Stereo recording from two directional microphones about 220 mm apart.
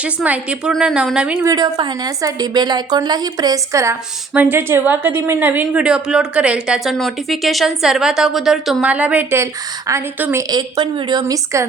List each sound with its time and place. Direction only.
0.0 s a woman's voice: 5° right (ahead or behind)
1.5 s a woman's voice: 15° right (ahead or behind)
10.5 s a woman's voice: 20° right (ahead or behind)